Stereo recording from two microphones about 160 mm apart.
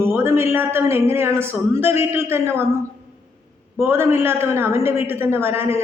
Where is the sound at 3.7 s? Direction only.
15° right (ahead or behind).